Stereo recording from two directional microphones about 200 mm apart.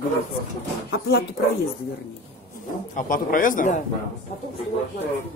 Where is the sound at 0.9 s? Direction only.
50° left (ahead or behind).